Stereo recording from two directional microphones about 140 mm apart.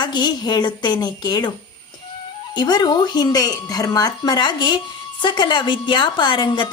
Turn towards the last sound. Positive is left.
turn(degrees=35)  # may be behind; listen again after turning